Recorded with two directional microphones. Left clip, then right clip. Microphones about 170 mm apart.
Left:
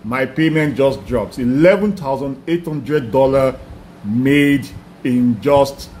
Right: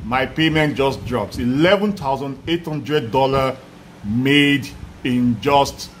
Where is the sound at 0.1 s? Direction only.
10° right (ahead or behind).